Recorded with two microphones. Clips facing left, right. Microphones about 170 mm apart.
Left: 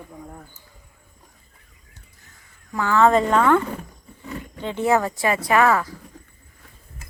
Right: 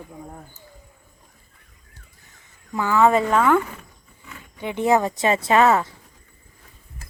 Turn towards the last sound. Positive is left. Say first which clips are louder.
# right 1 dB
turn(degrees=-25)  # may be behind; listen again after turning